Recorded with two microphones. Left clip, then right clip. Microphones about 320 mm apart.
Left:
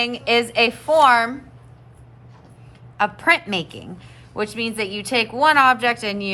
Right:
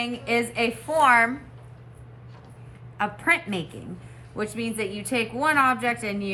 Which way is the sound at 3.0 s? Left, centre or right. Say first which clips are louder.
Left 6 dB; centre.